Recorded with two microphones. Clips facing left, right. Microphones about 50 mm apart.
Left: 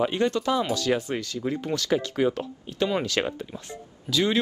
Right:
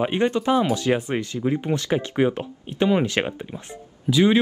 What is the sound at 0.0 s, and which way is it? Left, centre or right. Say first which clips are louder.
Speech: right 2 dB; right.